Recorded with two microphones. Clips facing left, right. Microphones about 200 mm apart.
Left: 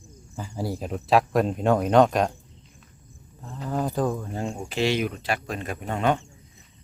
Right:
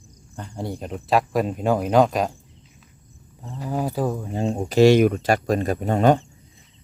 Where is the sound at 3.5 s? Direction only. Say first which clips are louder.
Right 1 dB; 10° right (ahead or behind).